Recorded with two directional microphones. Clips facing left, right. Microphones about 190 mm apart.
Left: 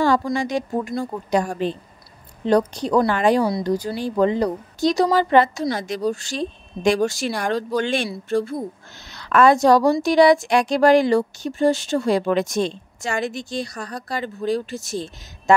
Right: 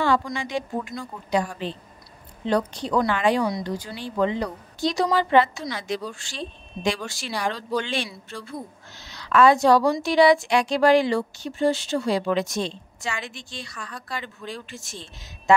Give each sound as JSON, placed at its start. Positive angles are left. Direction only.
{"t": 0.0, "sound": "a woman's voice", "side_deg": 40}